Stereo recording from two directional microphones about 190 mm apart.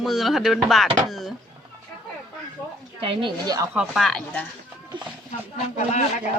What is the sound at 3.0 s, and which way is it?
Speech, 25° right (ahead or behind).